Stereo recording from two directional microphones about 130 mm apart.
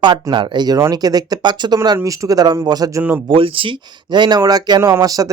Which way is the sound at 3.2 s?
40° right (ahead or behind).